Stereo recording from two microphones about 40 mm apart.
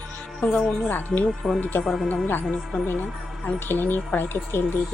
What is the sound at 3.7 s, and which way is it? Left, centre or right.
Speech, left.